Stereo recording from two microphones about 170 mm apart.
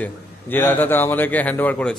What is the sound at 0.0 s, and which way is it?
A man's voice, 10° left (ahead or behind).